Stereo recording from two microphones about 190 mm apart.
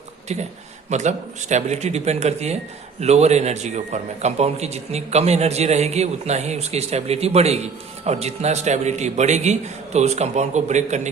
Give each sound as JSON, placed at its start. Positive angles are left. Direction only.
{"t": 0.9, "sound": "a man's voice", "side_deg": -40}